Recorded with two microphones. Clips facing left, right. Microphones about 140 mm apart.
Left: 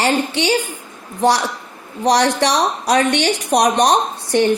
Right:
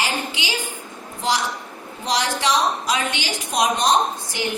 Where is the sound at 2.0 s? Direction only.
70° left (ahead or behind).